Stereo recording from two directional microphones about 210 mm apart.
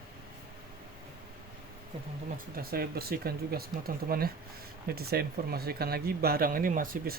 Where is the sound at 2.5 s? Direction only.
45° right (ahead or behind).